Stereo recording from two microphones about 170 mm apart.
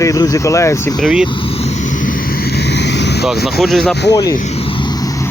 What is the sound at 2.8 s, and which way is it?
Vehicle, 90° left.